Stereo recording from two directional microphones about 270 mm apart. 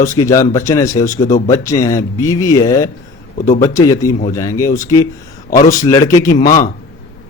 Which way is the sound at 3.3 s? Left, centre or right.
Left.